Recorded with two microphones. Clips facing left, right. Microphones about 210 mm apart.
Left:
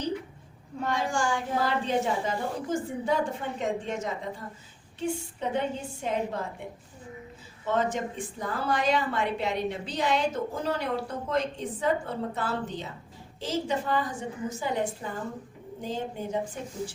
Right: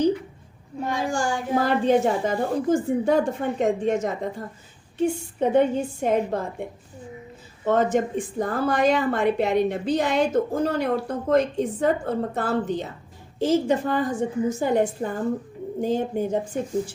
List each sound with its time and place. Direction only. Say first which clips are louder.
0.8 s a woman's voice: right 3 dB; 10° right (ahead or behind)
1.0 s speech: right 4 dB; 35° right (ahead or behind)
1.6 s a woman's voice: right 9 dB; 50° right (ahead or behind)
7.6 s a woman's voice: right 7 dB; 50° right (ahead or behind)